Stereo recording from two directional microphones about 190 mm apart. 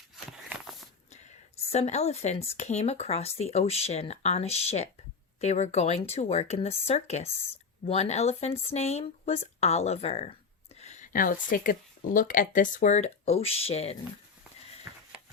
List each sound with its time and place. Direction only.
0.3 s walk: centre (ahead or behind)
1.1 s speech: 35° left (ahead or behind)
14.9 s a sound: 15° right (ahead or behind)